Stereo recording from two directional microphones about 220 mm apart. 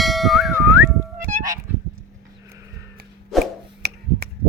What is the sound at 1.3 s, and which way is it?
Goose, 35° right (ahead or behind).